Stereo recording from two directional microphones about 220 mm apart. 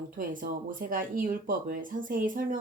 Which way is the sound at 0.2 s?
40° right (ahead or behind).